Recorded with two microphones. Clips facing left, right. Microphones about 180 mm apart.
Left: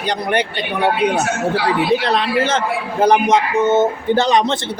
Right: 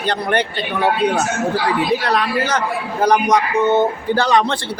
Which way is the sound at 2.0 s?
25° left (ahead or behind).